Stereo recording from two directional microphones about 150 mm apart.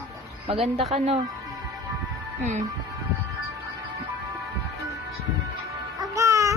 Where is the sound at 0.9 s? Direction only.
45° right (ahead or behind).